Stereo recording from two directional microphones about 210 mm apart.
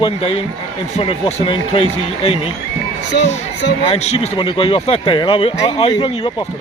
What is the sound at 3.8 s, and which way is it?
Speech, 30° left (ahead or behind).